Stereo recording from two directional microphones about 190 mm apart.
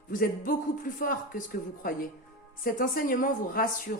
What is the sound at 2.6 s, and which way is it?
A woman's voice, 50° left (ahead or behind).